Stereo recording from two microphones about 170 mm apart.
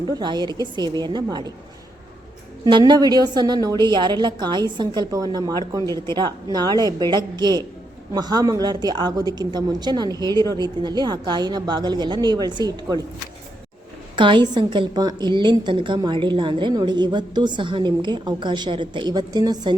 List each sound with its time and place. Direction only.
0.1 s a woman's voice: 25° right (ahead or behind)
2.6 s a woman's voice: 25° right (ahead or behind)
14.2 s a woman's voice: 30° right (ahead or behind)